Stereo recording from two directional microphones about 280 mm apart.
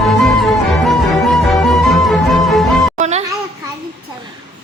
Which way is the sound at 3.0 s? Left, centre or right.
Right.